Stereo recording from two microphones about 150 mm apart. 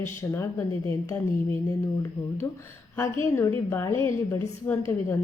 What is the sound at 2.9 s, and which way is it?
A woman's voice, 20° left (ahead or behind).